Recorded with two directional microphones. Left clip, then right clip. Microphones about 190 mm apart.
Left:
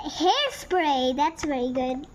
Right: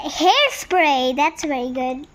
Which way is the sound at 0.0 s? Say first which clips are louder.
Right 7 dB; 30° right (ahead or behind).